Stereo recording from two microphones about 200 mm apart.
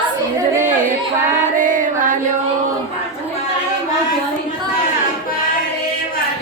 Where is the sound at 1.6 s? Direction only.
40° right (ahead or behind).